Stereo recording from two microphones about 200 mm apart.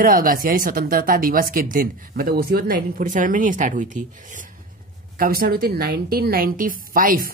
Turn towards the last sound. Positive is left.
turn(degrees=-45)  # may be behind; listen again after turning